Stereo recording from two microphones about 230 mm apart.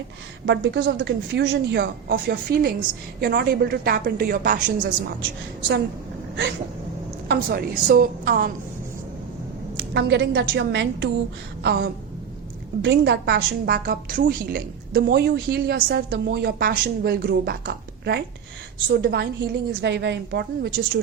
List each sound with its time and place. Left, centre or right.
0.4 s a woman's voice: right
7.3 s a woman's voice: right
9.9 s a woman's voice: right
11.6 s a sound: right
12.8 s a woman's voice: right